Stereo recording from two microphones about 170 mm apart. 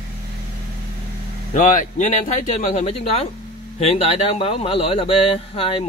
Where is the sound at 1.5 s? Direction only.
50° left (ahead or behind).